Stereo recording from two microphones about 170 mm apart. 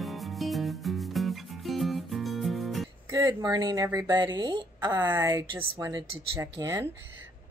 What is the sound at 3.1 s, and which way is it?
Speech, 20° right (ahead or behind).